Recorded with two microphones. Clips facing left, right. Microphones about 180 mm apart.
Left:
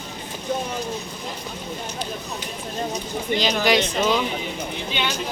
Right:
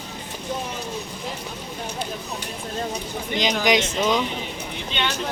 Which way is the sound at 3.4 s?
15° right (ahead or behind).